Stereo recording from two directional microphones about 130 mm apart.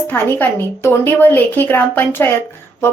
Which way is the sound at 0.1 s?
15° left (ahead or behind).